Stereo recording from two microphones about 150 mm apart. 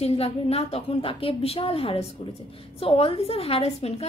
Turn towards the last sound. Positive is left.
turn(degrees=45)  # may be behind; listen again after turning